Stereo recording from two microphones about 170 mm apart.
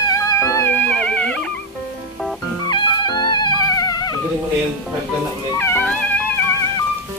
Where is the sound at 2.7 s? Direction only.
25° left (ahead or behind).